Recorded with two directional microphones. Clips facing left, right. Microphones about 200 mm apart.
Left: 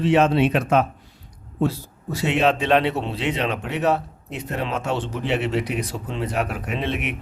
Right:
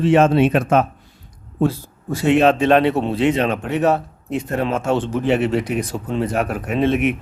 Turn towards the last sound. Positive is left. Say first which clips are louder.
# right 9 dB
turn(degrees=-45)  # may be behind; listen again after turning